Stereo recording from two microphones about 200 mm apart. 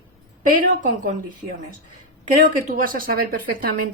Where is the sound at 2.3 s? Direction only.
40° right (ahead or behind).